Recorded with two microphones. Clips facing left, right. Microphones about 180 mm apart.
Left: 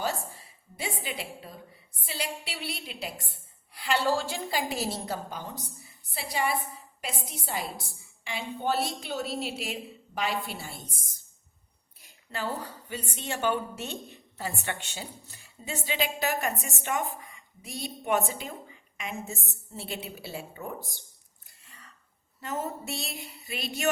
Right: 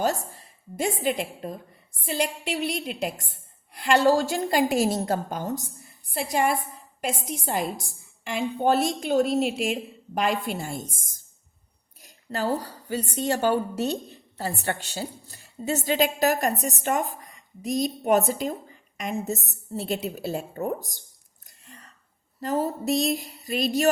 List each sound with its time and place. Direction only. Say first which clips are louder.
0.0 s a woman's voice: right 6 dB; 45° right (ahead or behind)
22.4 s a woman's voice: right 8 dB; 35° right (ahead or behind)